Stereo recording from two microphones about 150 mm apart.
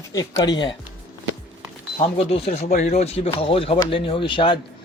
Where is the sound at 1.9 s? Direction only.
40° left (ahead or behind).